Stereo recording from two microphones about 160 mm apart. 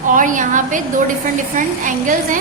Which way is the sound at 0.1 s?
55° right (ahead or behind).